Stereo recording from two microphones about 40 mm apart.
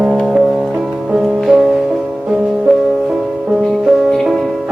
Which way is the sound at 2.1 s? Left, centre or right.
Right.